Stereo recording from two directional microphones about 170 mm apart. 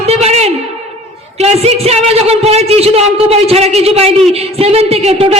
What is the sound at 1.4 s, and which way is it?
A man's voice, 40° right (ahead or behind).